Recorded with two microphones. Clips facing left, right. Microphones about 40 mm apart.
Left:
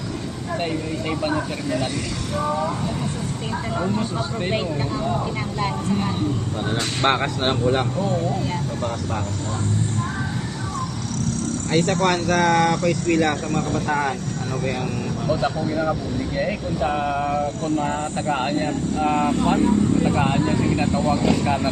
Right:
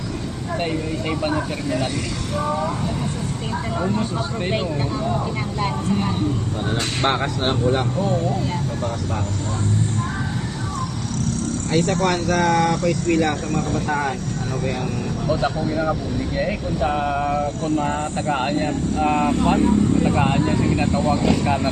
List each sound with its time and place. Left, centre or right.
0.5 s speech: centre
4.2 s speech: centre
7.0 s speech: left
11.7 s speech: left
13.6 s speech: left
15.3 s speech: centre